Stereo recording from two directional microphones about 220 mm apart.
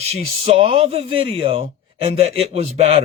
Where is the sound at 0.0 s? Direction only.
30° right (ahead or behind).